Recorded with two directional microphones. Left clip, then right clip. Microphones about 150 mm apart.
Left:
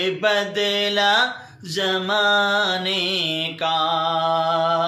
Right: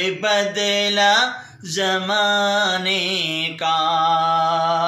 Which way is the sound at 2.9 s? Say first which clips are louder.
Right 1 dB; 45° left (ahead or behind).